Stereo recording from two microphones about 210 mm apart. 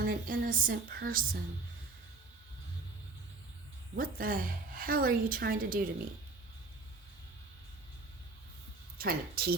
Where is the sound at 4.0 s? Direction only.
40° right (ahead or behind).